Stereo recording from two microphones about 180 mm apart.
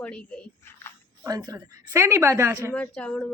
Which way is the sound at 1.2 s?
20° right (ahead or behind).